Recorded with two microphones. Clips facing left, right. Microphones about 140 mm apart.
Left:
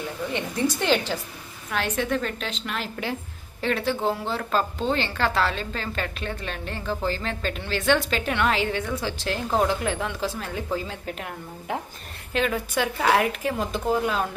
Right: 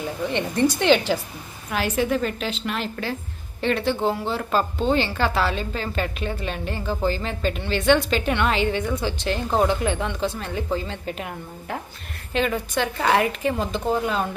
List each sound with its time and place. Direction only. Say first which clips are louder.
0.3 s a woman's voice: right 5 dB; 5° left (ahead or behind)
11.7 s a woman's voice: left 1 dB; 15° left (ahead or behind)
12.3 s a woman's voice: right 2 dB; centre (ahead or behind)